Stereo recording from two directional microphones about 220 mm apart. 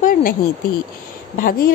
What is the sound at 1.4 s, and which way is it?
Speech, 40° left (ahead or behind).